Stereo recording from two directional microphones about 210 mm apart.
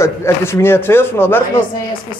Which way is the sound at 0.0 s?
10° left (ahead or behind).